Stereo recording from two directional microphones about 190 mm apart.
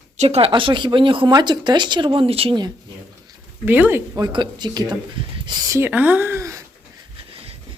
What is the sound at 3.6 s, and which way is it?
Speech, 10° right (ahead or behind).